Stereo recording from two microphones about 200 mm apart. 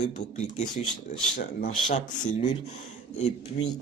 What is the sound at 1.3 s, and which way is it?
Speech, 40° left (ahead or behind).